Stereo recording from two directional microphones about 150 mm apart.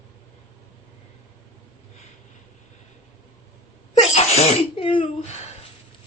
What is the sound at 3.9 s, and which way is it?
Sneeze, 45° left (ahead or behind).